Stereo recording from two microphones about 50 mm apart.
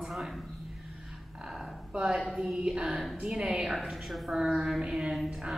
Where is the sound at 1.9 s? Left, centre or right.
Centre.